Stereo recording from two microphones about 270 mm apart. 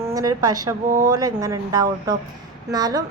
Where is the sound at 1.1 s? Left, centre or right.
Centre.